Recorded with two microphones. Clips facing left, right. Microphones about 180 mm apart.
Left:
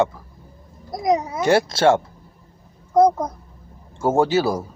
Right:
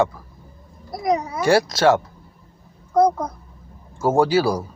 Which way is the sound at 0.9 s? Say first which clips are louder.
Left 1 dB; 20° left (ahead or behind).